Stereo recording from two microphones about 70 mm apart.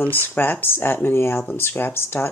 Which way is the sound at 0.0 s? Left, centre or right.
Left.